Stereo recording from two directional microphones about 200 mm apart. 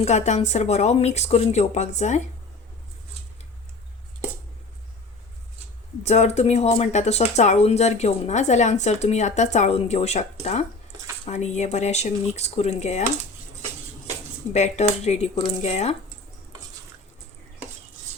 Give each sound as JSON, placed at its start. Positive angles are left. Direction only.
{"t": 0.0, "sound": "speech", "side_deg": 35}
{"t": 6.0, "sound": "speech", "side_deg": 35}
{"t": 14.5, "sound": "speech", "side_deg": 35}